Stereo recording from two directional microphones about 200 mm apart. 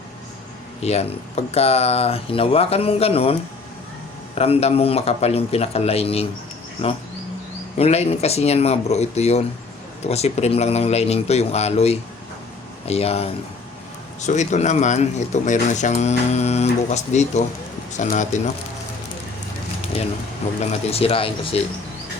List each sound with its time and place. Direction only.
0.8 s speech: 30° left (ahead or behind)
4.4 s speech: 30° left (ahead or behind)
7.8 s speech: 30° left (ahead or behind)
20.7 s speech: 30° left (ahead or behind)